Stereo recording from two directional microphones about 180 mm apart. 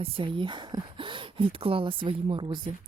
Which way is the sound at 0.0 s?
30° right (ahead or behind).